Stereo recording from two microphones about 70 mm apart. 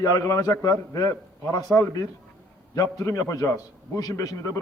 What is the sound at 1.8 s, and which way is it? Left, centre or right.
A man's voice, left.